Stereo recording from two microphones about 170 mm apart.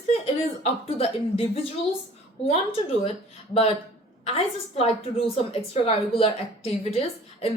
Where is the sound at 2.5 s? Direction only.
35° left (ahead or behind).